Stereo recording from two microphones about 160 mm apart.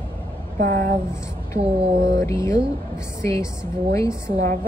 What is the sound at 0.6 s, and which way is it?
Speech, 60° right (ahead or behind).